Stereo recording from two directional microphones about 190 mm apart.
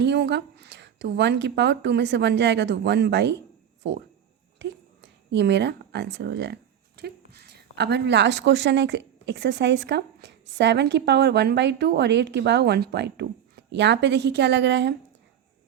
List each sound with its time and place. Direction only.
0.0 s speech: 65° right (ahead or behind)
4.6 s a sound: 65° right (ahead or behind)
5.3 s speech: 65° right (ahead or behind)